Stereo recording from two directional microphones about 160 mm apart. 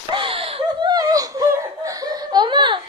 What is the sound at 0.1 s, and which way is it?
Laughter, 35° right (ahead or behind).